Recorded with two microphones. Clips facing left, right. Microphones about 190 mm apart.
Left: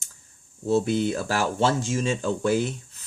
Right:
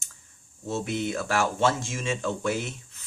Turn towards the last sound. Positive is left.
turn(degrees=35)  # may be behind; listen again after turning